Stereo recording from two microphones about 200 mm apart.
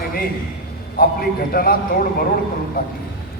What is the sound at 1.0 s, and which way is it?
Speech, 45° left (ahead or behind).